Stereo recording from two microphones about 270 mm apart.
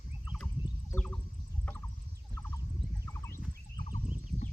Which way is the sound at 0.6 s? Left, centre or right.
Centre.